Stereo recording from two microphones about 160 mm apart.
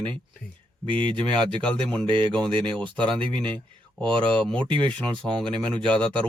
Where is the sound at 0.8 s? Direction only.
30° right (ahead or behind).